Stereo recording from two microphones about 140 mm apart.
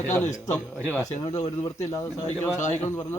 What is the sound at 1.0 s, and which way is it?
Speech, 55° left (ahead or behind).